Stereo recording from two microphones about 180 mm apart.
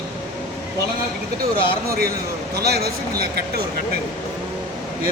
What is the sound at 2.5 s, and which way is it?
A man's voice, 60° right (ahead or behind).